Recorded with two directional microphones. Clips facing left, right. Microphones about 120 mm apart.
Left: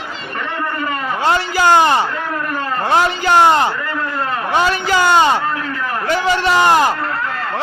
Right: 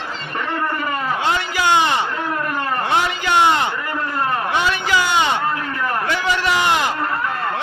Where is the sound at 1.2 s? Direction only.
40° left (ahead or behind).